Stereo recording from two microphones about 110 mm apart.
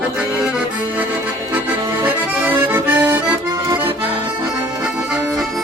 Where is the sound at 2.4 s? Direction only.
15° right (ahead or behind).